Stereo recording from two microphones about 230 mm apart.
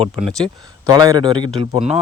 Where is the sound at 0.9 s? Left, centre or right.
Centre.